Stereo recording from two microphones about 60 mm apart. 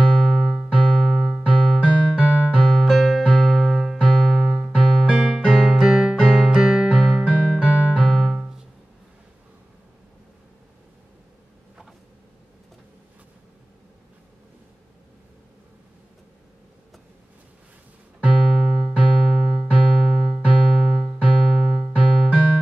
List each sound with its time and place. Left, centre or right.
0.0 s keyboard: centre
1.5 s music: centre
1.8 s music: centre
2.5 s electric piano: centre
5.0 s keyboard: centre
6.5 s music: centre
7.2 s music: centre
8.0 s keyboard: centre
8.4 s music: centre
18.2 s keyboard: centre